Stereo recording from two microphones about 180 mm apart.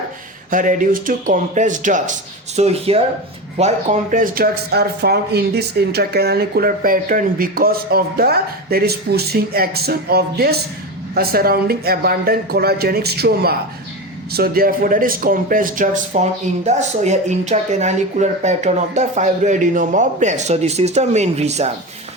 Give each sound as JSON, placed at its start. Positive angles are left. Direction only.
{"t": 0.5, "sound": "speech", "side_deg": -45}